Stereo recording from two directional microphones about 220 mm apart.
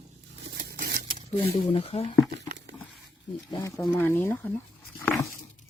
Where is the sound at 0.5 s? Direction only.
45° right (ahead or behind).